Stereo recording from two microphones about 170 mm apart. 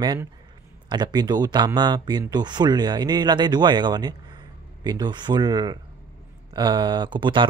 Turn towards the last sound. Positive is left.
turn(degrees=-30)  # may be behind; listen again after turning